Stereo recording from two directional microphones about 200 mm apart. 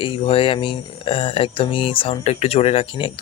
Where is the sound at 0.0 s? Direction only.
25° left (ahead or behind).